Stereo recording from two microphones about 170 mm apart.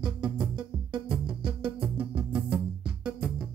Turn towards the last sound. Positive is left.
turn(degrees=-5)  # may be behind; listen again after turning